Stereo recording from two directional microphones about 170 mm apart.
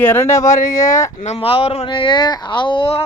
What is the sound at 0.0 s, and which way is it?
Speech, 10° left (ahead or behind).